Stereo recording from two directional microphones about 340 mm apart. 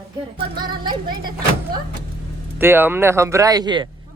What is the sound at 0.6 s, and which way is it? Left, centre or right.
Speech, centre.